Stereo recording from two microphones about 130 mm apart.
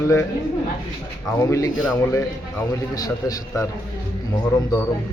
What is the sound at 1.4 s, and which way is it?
Speech, 25° left (ahead or behind).